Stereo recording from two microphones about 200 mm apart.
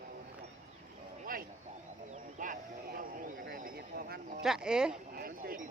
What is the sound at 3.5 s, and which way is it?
Neigh, 45° right (ahead or behind).